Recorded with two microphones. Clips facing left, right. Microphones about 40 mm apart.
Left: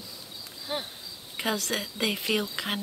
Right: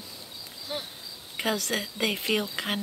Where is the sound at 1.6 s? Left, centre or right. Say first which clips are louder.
Right 1 dB; centre.